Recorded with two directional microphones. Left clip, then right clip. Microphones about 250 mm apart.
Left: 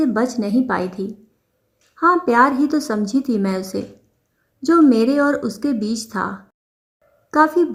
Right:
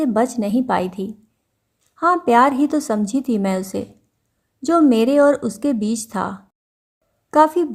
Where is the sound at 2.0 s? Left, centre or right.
Right.